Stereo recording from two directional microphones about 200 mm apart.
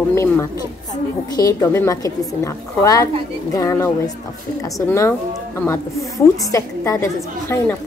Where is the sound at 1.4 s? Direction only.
15° left (ahead or behind).